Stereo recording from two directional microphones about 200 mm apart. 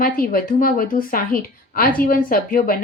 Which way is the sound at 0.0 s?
45° left (ahead or behind).